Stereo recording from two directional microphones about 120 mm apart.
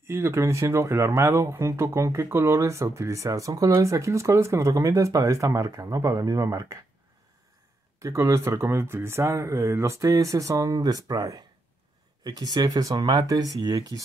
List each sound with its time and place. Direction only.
0.0 s speech: 20° right (ahead or behind)
8.0 s speech: 25° right (ahead or behind)